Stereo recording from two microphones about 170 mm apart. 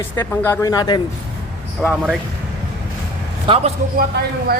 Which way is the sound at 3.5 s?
30° right (ahead or behind).